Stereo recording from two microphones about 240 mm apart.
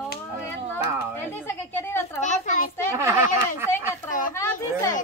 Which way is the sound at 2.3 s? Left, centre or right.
Left.